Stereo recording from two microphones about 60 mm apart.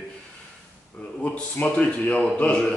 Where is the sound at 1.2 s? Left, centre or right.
Left.